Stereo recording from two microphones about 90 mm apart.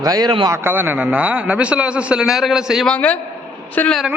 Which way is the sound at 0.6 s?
20° right (ahead or behind).